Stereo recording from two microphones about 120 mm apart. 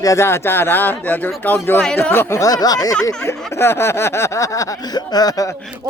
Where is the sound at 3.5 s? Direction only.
20° left (ahead or behind).